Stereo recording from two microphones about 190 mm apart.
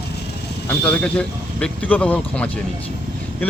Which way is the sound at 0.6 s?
5° left (ahead or behind).